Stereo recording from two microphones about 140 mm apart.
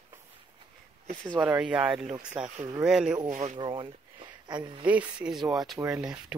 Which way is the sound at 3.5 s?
35° right (ahead or behind).